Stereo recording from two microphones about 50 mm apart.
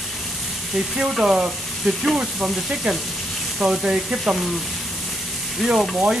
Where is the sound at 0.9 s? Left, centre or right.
Centre.